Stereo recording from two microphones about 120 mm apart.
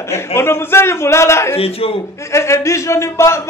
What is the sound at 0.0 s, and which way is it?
A man's voice, 20° left (ahead or behind).